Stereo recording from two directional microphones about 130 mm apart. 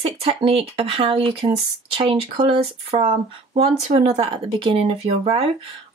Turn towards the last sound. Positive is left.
turn(degrees=-50)  # may be behind; listen again after turning